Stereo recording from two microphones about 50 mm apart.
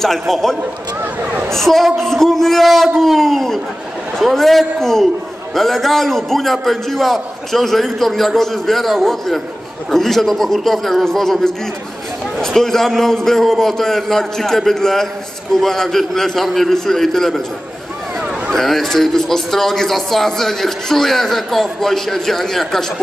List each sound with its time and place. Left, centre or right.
0.0 s a man's voice: centre
1.2 s speech: right
1.5 s a man's voice: centre
18.5 s a man's voice: centre